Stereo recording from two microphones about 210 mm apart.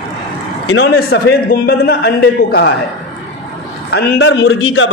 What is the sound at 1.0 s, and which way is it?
A man's voice, 50° left (ahead or behind).